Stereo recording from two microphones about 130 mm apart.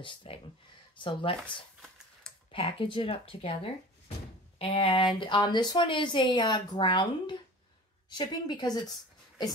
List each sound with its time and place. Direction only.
0.0 s speech: 40° left (ahead or behind)
2.5 s speech: 45° left (ahead or behind)